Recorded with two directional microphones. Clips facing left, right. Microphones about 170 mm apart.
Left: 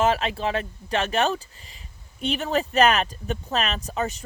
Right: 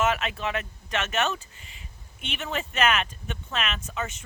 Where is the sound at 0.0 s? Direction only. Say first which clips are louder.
Left 4 dB; 30° left (ahead or behind).